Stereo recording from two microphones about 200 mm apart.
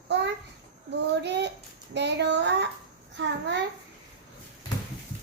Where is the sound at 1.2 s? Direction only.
60° right (ahead or behind).